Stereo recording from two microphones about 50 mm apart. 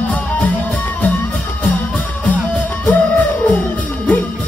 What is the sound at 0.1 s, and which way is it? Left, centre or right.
Music, left.